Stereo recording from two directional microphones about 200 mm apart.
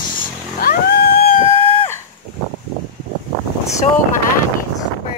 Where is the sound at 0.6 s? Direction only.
50° left (ahead or behind).